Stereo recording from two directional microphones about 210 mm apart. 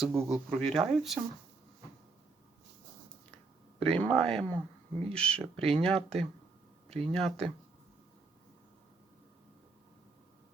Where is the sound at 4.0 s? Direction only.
5° left (ahead or behind).